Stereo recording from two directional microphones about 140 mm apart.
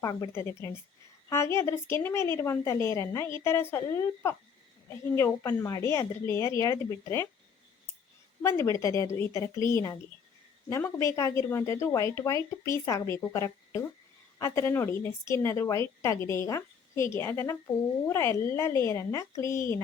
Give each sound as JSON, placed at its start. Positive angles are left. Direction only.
{"t": 0.0, "sound": "a woman's voice", "side_deg": 25}
{"t": 8.4, "sound": "a woman's voice", "side_deg": 20}